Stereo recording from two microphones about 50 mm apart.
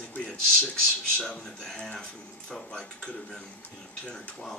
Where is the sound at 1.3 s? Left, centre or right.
Centre.